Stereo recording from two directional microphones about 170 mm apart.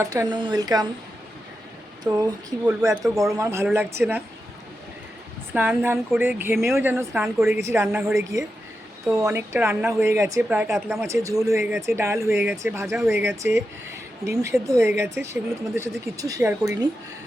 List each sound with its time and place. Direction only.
0.0 s speech: 20° right (ahead or behind)
2.0 s a woman's voice: 20° right (ahead or behind)
5.5 s a woman's voice: 10° right (ahead or behind)